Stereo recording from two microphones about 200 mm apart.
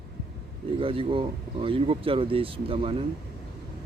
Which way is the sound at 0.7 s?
25° right (ahead or behind).